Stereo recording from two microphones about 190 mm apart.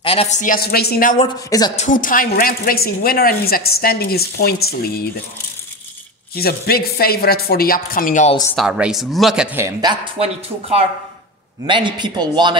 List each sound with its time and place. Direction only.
0.0 s a woman's voice: 30° left (ahead or behind); by 1.2 s 50° left (ahead or behind)
1.2 s speech: 20° left (ahead or behind)
1.8 s a woman's voice: 45° left (ahead or behind)
6.3 s a woman's voice: 55° left (ahead or behind)
8.5 s speech: 5° right (ahead or behind)
10.1 s a man's voice: 35° right (ahead or behind)